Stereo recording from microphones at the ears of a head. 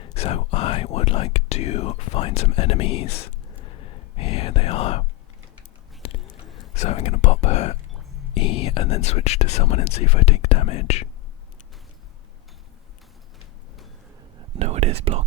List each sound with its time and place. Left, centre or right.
0.0 s speech: left
6.0 s whispering: left
8.3 s speech: left
14.3 s speech: right